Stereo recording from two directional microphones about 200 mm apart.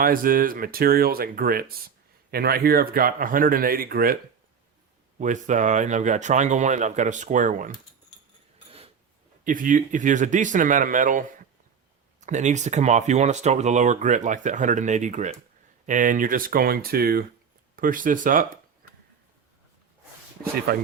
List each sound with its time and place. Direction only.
0.0 s speech: 45° right (ahead or behind)
5.2 s speech: 40° right (ahead or behind)
9.4 s speech: 40° right (ahead or behind)
18.8 s a sound: 50° right (ahead or behind)
20.7 s speech: 50° right (ahead or behind)